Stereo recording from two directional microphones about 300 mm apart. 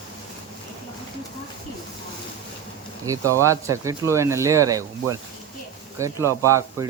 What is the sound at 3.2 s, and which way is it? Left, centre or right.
Speech, centre.